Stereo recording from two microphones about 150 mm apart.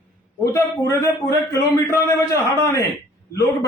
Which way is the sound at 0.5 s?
20° left (ahead or behind).